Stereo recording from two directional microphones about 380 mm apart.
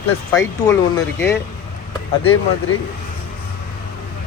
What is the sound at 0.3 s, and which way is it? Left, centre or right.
Speech, centre.